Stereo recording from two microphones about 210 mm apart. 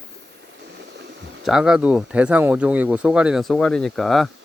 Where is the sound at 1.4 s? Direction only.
Centre (ahead or behind).